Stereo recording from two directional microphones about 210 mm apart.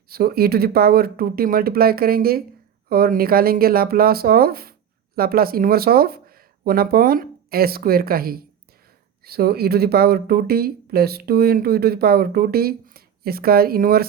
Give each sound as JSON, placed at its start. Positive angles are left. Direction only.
{"t": 0.1, "sound": "speech", "side_deg": -45}